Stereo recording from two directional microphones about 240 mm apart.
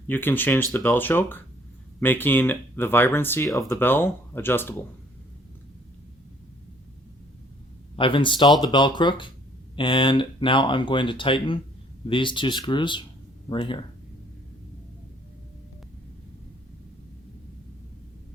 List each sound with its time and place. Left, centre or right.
0.1 s speech: centre
7.9 s speech: left